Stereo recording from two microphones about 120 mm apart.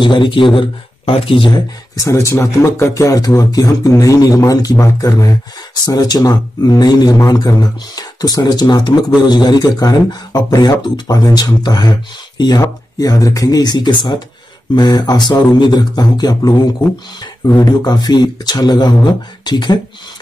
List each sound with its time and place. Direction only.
0.0 s speech: 40° left (ahead or behind)
2.0 s a man's voice: 25° left (ahead or behind)